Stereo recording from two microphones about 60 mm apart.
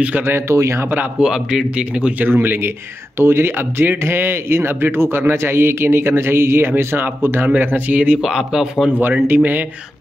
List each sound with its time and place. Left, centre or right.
0.3 s a man's voice: right
1.2 s speech: centre
1.8 s speech: right
2.2 s a man's voice: right
8.2 s speech: centre
9.0 s speech: right